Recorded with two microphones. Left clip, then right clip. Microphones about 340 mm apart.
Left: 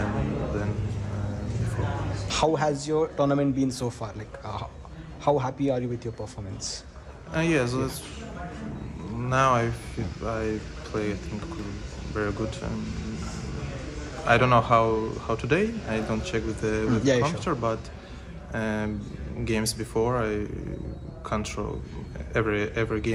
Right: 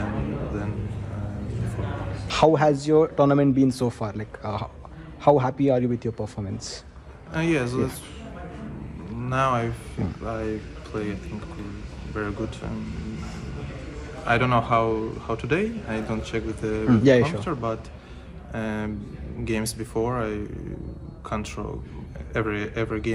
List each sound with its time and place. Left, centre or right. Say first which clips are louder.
2.2 s speech: right 6 dB; right
7.3 s speech: right 1 dB; centre
9.2 s speech: left 1 dB; centre
14.2 s speech: left 2 dB; centre
17.0 s speech: right 6 dB; right
17.4 s speech: left 1 dB; centre